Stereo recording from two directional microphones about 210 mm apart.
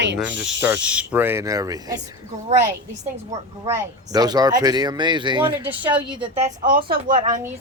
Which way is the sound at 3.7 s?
20° right (ahead or behind).